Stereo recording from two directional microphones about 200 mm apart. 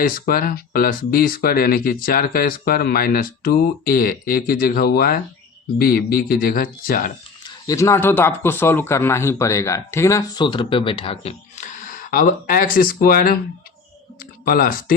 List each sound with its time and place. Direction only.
0.0 s speech: 45° left (ahead or behind)
7.4 s a man's voice: 15° left (ahead or behind); by 14.9 s 45° left (ahead or behind)